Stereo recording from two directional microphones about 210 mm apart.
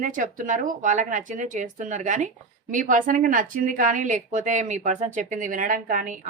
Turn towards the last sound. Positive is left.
turn(degrees=-40)  # may be behind; listen again after turning